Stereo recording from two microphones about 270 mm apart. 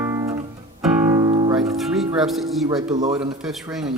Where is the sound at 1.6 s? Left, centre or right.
Centre.